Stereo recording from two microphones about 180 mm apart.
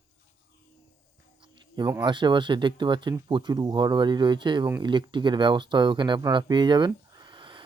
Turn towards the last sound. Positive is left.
turn(degrees=-25)  # may be behind; listen again after turning